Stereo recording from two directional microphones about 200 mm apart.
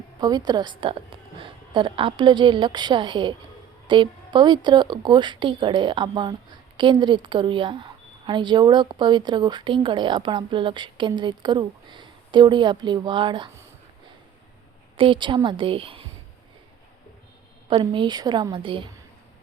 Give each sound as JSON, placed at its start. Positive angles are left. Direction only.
{"t": 0.2, "sound": "speech", "side_deg": -20}
{"t": 14.9, "sound": "speech", "side_deg": -25}
{"t": 17.7, "sound": "speech", "side_deg": -25}